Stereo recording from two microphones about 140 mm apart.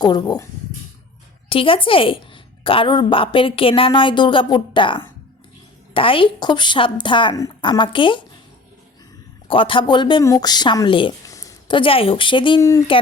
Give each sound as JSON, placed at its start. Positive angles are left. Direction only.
{"t": 0.0, "sound": "a woman's voice", "side_deg": 30}
{"t": 1.5, "sound": "a woman's voice", "side_deg": 40}
{"t": 9.5, "sound": "a woman's voice", "side_deg": 40}
{"t": 11.3, "sound": "a sound", "side_deg": 25}
{"t": 11.7, "sound": "a woman's voice", "side_deg": 40}